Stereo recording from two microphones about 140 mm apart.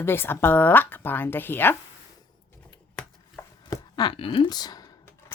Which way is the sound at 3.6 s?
30° left (ahead or behind).